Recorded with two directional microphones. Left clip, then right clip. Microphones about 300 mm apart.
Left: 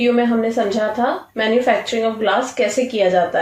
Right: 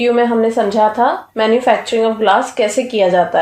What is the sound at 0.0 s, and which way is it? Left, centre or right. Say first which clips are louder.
A woman's voice: right 4 dB; right.